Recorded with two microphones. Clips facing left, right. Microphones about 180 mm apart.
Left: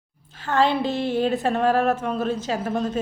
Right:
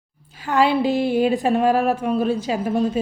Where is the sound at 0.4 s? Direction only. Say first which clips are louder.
Right 3 dB; 10° right (ahead or behind).